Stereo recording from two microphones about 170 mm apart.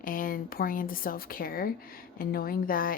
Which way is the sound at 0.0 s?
55° left (ahead or behind).